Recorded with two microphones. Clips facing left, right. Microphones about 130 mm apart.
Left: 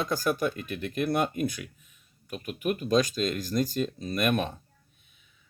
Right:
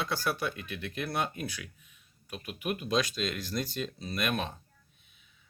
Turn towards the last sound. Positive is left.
turn(degrees=50)  # may be behind; listen again after turning